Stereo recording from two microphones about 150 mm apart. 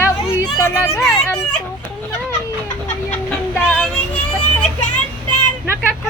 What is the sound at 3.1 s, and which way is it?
Music, 5° left (ahead or behind).